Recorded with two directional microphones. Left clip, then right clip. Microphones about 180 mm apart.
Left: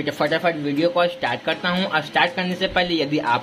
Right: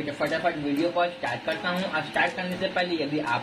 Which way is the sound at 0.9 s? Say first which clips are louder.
Left 6 dB; 45° left (ahead or behind).